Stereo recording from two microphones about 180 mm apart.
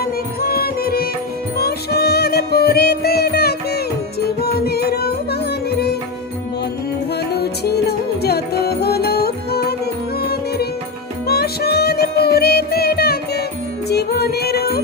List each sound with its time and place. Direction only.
0.0 s music: 60° left (ahead or behind)
7.3 s music: 65° left (ahead or behind)